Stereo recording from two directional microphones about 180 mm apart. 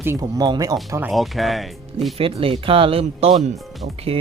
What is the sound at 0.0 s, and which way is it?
Speech, 15° right (ahead or behind).